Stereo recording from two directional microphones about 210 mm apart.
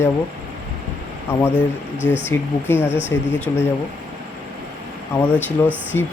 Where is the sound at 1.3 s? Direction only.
10° left (ahead or behind).